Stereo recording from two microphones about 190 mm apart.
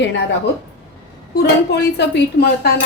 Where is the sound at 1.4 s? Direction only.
60° left (ahead or behind).